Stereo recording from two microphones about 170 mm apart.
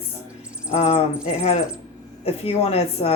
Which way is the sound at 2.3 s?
35° left (ahead or behind).